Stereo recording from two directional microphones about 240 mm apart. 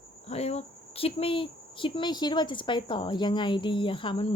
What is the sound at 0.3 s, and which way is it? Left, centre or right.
Speech, left.